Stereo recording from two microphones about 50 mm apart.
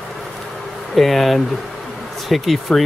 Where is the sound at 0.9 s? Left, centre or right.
Centre.